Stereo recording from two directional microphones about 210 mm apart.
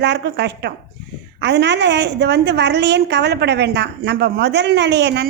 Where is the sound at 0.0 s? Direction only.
55° right (ahead or behind).